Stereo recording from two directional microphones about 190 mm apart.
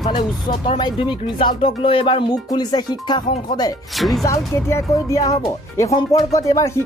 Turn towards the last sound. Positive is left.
turn(degrees=15)  # may be behind; listen again after turning